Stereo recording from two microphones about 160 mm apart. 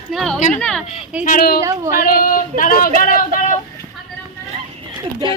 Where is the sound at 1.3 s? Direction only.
70° left (ahead or behind).